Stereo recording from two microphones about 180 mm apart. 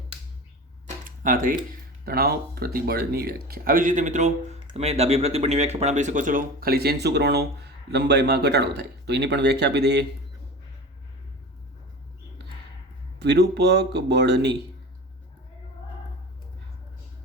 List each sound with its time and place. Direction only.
1.0 s tick-tock: 50° right (ahead or behind)
2.0 s speech: 60° right (ahead or behind)
13.1 s speech: 65° right (ahead or behind)